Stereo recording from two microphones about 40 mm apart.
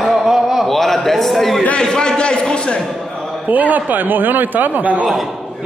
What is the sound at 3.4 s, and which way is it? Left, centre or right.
A man's voice, right.